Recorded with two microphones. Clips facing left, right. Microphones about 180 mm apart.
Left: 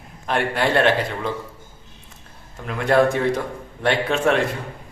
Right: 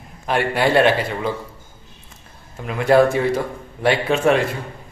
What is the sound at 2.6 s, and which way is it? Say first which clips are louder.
Speech: right 3 dB; 5° right (ahead or behind).